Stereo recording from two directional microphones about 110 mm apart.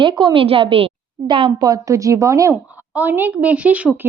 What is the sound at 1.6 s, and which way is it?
Speech, 30° right (ahead or behind).